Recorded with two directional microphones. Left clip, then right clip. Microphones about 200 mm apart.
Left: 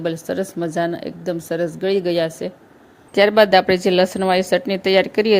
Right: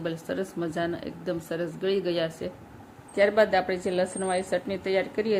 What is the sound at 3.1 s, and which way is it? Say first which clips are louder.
A woman's voice: left 9 dB; 45° left (ahead or behind).